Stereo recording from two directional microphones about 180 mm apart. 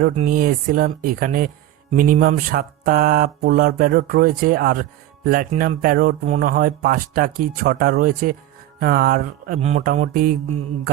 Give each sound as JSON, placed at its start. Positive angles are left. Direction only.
{"t": 0.3, "sound": "speech", "side_deg": -50}
{"t": 6.5, "sound": "speech", "side_deg": -55}
{"t": 9.6, "sound": "speech", "side_deg": -40}